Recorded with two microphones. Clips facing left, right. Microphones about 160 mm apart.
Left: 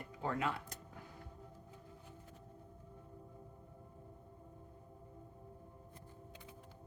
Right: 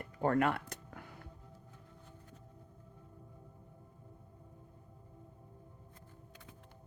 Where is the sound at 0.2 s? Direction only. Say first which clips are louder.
Right 8 dB; 55° right (ahead or behind).